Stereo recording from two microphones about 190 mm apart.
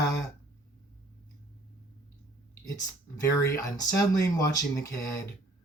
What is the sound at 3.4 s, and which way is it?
Speech, 15° left (ahead or behind).